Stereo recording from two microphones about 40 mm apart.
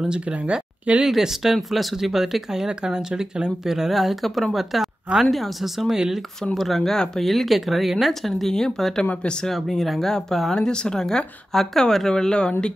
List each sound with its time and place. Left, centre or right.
0.3 s speech: right
1.0 s speech: centre
2.5 s speech: centre
3.9 s speech: centre
6.4 s speech: centre
10.5 s speech: centre